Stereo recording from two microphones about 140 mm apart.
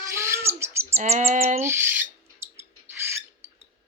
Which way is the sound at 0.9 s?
50° right (ahead or behind).